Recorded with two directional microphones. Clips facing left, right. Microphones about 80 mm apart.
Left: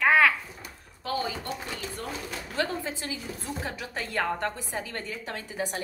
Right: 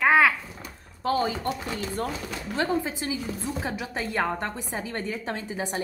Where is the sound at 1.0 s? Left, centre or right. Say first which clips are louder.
Right 6 dB; right.